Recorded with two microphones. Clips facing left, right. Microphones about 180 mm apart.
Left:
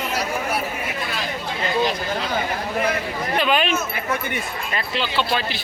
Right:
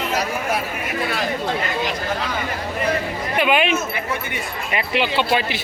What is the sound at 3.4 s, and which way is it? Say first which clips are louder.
Speech: right 3 dB; 15° right (ahead or behind).